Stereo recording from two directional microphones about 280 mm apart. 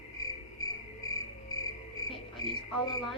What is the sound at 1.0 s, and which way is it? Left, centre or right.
Music, centre.